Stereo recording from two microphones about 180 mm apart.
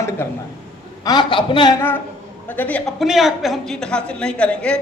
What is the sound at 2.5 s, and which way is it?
A woman's voice, 10° left (ahead or behind).